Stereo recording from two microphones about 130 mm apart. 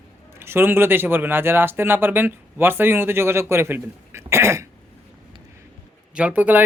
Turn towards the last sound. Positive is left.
turn(degrees=-15)  # may be behind; listen again after turning